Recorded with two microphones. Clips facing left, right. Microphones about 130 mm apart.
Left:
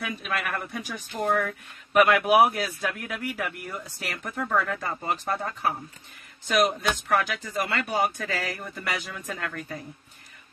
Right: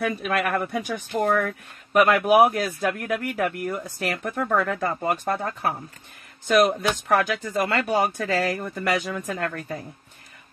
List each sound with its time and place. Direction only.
0.0 s speech: 50° right (ahead or behind)
1.9 s speech: 40° right (ahead or behind)